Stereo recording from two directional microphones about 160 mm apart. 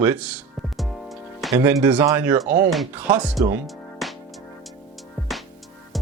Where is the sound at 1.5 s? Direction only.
20° right (ahead or behind).